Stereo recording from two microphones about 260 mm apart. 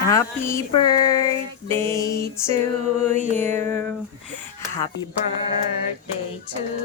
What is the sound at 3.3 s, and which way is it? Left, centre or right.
Music, right.